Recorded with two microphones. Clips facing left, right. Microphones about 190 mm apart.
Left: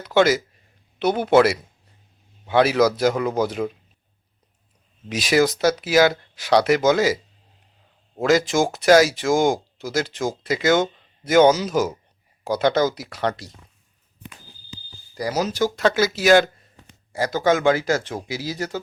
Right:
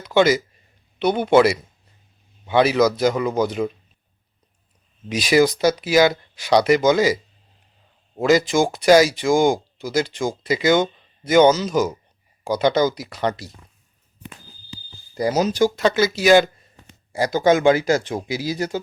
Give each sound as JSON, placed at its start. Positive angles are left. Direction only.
{"t": 0.0, "sound": "speech", "side_deg": 5}
{"t": 5.0, "sound": "speech", "side_deg": 0}
{"t": 15.1, "sound": "speech", "side_deg": -20}
{"t": 15.7, "sound": "speech", "side_deg": 0}
{"t": 17.1, "sound": "speech", "side_deg": -15}